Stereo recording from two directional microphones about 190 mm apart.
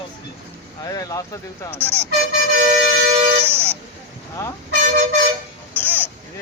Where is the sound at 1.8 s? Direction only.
10° right (ahead or behind).